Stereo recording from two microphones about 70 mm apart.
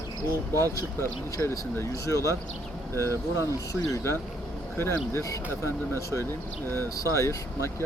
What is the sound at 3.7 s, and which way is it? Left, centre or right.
Speech, left.